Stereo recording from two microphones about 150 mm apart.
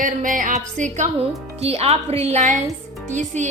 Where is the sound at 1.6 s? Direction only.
45° right (ahead or behind).